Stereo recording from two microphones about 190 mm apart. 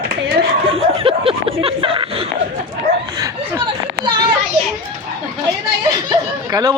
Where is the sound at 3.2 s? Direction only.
20° right (ahead or behind).